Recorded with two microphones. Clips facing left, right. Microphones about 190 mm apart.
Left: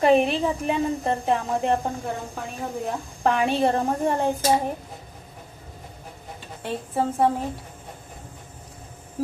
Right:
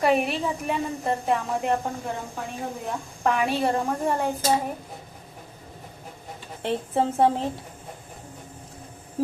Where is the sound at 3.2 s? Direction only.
30° left (ahead or behind).